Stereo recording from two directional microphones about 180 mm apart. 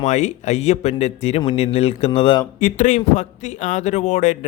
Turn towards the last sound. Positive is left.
turn(degrees=40)  # may be behind; listen again after turning